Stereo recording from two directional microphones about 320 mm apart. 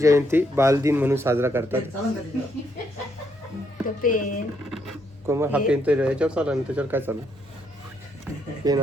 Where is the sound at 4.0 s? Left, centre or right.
Left.